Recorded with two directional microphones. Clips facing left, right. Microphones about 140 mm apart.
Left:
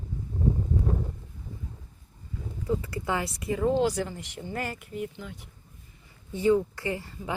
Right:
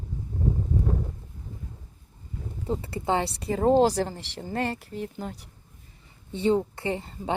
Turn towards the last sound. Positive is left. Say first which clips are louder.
# right 2 dB
turn(degrees=-25)  # may be behind; listen again after turning